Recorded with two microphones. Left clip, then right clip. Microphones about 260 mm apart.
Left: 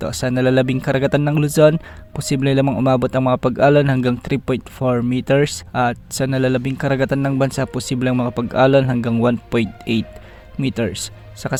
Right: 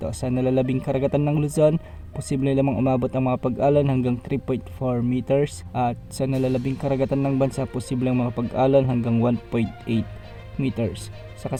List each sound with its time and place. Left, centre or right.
0.0 s speech: left
8.1 s a man's voice: left
8.4 s speech: left